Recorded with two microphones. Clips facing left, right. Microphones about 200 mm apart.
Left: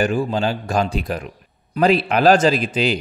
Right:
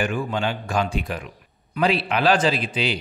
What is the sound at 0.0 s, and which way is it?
A man's voice, 35° left (ahead or behind).